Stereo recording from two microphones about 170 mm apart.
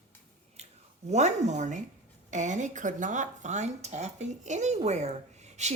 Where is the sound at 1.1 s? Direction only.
40° right (ahead or behind).